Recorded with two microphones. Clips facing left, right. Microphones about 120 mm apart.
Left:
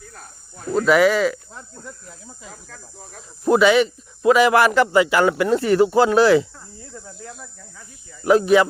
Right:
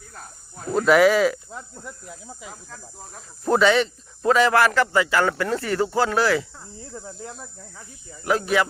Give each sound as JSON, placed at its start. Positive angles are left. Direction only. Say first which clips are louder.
{"t": 0.7, "sound": "speech", "louder": "even", "side_deg": 0}
{"t": 3.4, "sound": "speech", "louder": "left 3 dB", "side_deg": 10}
{"t": 6.9, "sound": "speech", "louder": "right 2 dB", "side_deg": -25}
{"t": 8.2, "sound": "speech", "louder": "left 7 dB", "side_deg": 20}